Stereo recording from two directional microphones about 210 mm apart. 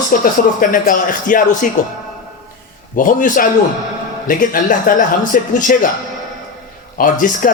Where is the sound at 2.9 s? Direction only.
40° left (ahead or behind).